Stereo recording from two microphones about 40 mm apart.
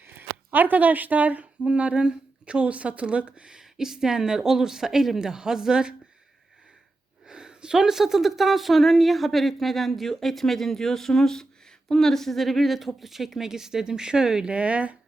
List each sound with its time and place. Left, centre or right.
0.0 s speech: right
1.6 s a woman's voice: right
3.5 s speech: centre
7.3 s speech: centre